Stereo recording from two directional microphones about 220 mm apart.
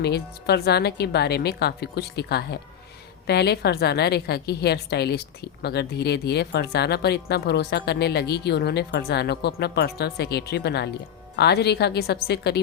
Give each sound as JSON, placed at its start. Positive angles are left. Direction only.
{"t": 0.0, "sound": "a woman's voice", "side_deg": 50}